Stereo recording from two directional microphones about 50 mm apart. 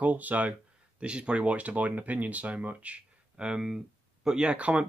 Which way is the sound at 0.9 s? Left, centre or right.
Right.